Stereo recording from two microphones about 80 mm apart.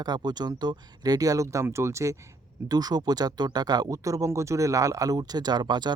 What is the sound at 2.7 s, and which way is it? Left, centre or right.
Speech, right.